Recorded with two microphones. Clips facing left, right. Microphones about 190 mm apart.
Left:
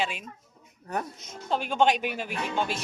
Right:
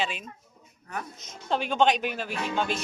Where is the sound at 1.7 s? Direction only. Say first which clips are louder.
Even; 10° left (ahead or behind).